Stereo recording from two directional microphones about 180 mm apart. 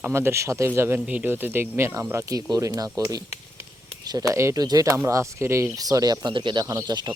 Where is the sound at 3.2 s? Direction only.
35° left (ahead or behind).